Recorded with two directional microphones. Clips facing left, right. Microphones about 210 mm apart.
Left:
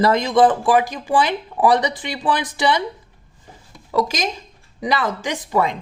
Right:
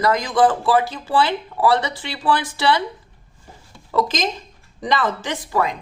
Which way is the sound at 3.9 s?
10° left (ahead or behind).